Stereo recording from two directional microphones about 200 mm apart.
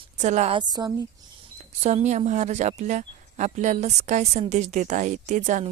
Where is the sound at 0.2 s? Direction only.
35° right (ahead or behind).